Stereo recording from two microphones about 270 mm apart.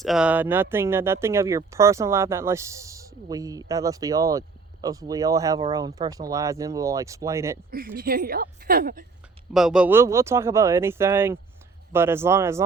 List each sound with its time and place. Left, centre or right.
0.0 s speech: centre
7.7 s a woman's voice: right
9.5 s speech: centre